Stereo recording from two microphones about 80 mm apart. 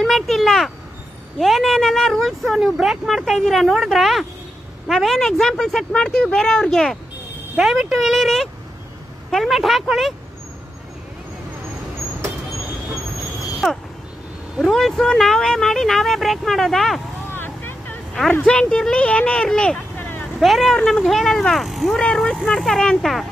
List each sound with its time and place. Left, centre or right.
0.0 s speech: centre
14.6 s speech: centre
17.3 s vehicle: left
18.4 s speech: centre
20.0 s vehicle: left
20.3 s speech: centre
22.0 s speech: centre